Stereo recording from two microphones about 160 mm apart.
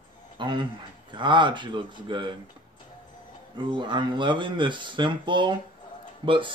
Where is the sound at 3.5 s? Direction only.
30° right (ahead or behind).